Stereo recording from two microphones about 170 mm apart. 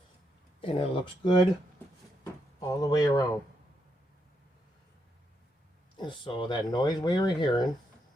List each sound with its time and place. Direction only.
0.6 s speech: 30° left (ahead or behind)
2.2 s a sound: 20° left (ahead or behind)
6.0 s speech: 30° left (ahead or behind)